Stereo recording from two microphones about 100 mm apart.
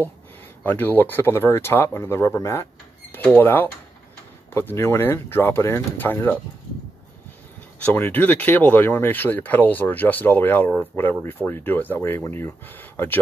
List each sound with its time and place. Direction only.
0.7 s speech: 20° left (ahead or behind)
7.8 s speech: 20° left (ahead or behind)